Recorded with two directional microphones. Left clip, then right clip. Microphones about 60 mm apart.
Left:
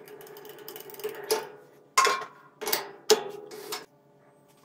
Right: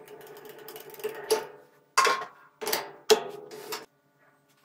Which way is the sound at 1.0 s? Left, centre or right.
Left.